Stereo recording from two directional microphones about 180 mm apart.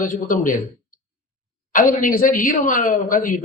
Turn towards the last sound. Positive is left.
turn(degrees=50)  # may be behind; listen again after turning